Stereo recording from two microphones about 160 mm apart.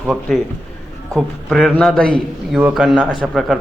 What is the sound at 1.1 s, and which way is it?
A man's voice, centre (ahead or behind).